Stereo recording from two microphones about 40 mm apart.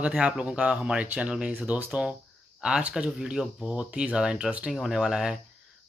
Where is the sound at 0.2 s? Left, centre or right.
Right.